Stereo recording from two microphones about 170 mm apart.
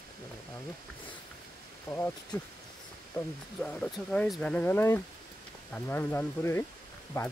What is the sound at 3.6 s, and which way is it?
Speech, 5° left (ahead or behind).